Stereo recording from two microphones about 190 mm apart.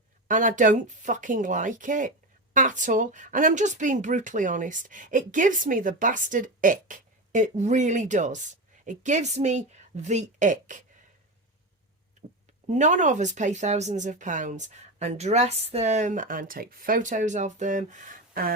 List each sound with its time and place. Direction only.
0.3 s speech: 45° right (ahead or behind)
12.7 s speech: 40° right (ahead or behind)